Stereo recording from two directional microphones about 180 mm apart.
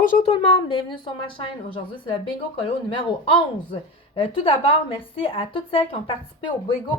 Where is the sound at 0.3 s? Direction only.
25° left (ahead or behind).